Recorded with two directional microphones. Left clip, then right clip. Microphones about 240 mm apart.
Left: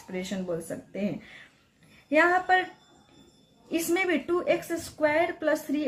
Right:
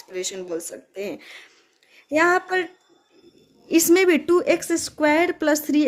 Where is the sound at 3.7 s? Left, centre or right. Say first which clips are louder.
Right 10 dB; right.